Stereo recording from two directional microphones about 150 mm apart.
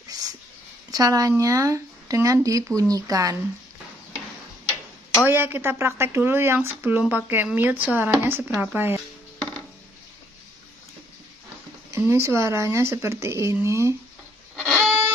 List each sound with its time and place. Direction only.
0.9 s speech: 25° right (ahead or behind)
5.2 s speech: 15° right (ahead or behind)
11.9 s speech: 20° right (ahead or behind)
14.7 s a sound: 5° left (ahead or behind)